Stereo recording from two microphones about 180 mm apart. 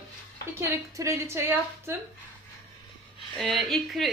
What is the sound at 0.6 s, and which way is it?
A woman's voice, 15° right (ahead or behind).